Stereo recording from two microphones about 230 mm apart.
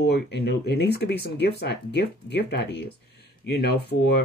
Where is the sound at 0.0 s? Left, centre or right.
Left.